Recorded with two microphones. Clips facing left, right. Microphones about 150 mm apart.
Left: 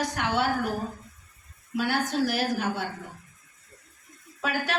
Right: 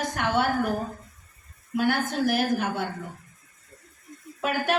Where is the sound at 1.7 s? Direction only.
50° right (ahead or behind).